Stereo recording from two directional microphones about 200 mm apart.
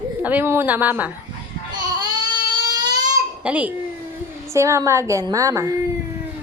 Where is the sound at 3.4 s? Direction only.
5° right (ahead or behind).